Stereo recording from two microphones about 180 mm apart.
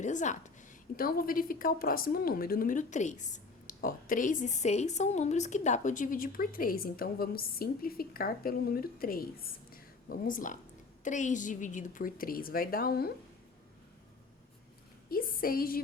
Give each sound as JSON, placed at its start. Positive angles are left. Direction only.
{"t": 0.0, "sound": "a sound", "side_deg": 40}
{"t": 0.9, "sound": "a woman's voice", "side_deg": 50}
{"t": 15.1, "sound": "a woman's voice", "side_deg": 55}